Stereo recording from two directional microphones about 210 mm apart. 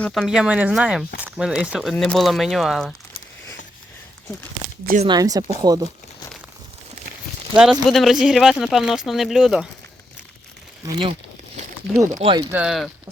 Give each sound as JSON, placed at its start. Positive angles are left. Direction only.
{"t": 0.0, "sound": "speech", "side_deg": 0}
{"t": 5.0, "sound": "speech", "side_deg": -20}
{"t": 7.5, "sound": "speech", "side_deg": -5}
{"t": 10.8, "sound": "speech", "side_deg": -25}
{"t": 12.2, "sound": "speech", "side_deg": -20}
{"t": 12.5, "sound": "speech", "side_deg": -5}